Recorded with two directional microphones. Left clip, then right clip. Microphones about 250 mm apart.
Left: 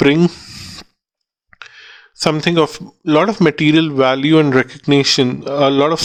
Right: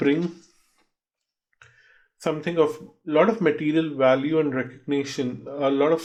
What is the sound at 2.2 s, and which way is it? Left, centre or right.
Speech, left.